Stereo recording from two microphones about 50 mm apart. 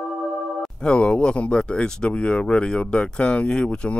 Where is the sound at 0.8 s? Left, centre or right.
Left.